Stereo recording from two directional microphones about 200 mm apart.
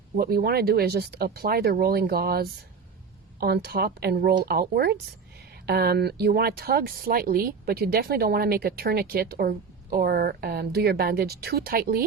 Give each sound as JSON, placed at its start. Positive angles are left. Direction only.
{"t": 0.2, "sound": "speech", "side_deg": -50}